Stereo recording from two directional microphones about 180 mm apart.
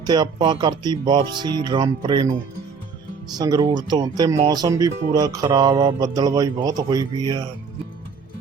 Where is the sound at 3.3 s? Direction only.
20° right (ahead or behind).